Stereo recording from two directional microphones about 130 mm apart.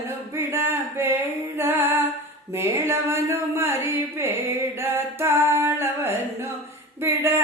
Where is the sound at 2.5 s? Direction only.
20° right (ahead or behind).